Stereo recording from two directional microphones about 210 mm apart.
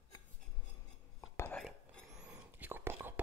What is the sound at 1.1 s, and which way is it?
Cutlery, 10° left (ahead or behind).